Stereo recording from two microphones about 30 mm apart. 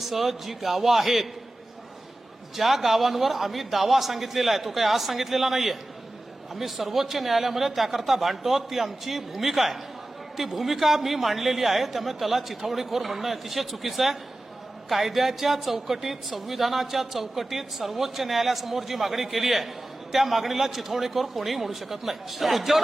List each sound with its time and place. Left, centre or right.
0.0 s a man's voice: centre
2.6 s speech: centre